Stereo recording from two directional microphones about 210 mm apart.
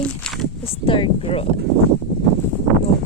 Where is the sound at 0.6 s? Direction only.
25° left (ahead or behind).